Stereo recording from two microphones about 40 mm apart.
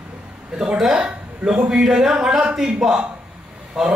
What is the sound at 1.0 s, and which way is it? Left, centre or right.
Speech, right.